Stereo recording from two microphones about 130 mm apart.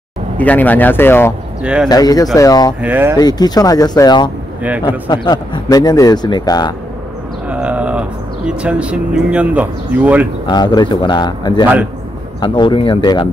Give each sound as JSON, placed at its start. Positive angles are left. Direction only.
{"t": 0.4, "sound": "speech", "side_deg": 10}
{"t": 1.6, "sound": "speech", "side_deg": -5}
{"t": 1.9, "sound": "speech", "side_deg": 30}
{"t": 2.8, "sound": "speech", "side_deg": -15}
{"t": 3.2, "sound": "a man's voice", "side_deg": 30}
{"t": 7.4, "sound": "a sound", "side_deg": -10}
{"t": 8.5, "sound": "speech", "side_deg": -10}
{"t": 10.4, "sound": "a man's voice", "side_deg": 35}